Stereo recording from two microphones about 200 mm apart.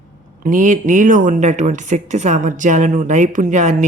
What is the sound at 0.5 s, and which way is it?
Speech, 40° right (ahead or behind).